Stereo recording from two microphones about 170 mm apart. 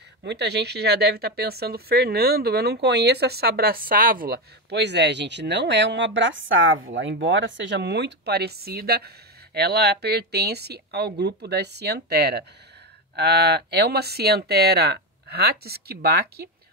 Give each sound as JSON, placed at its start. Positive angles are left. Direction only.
{"t": 0.2, "sound": "speech", "side_deg": -85}